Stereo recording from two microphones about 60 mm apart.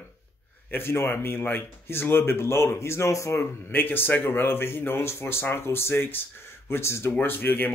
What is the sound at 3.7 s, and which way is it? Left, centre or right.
Speech, left.